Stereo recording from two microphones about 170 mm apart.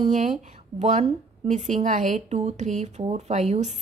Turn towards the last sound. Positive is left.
turn(degrees=-40)  # may be behind; listen again after turning